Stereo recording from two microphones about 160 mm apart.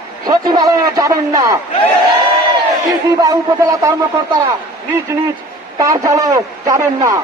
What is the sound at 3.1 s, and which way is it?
Speech, 25° right (ahead or behind).